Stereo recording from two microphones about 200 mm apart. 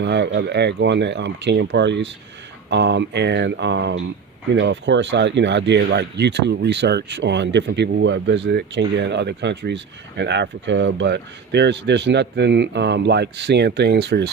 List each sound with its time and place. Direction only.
0.0 s speech: 60° right (ahead or behind)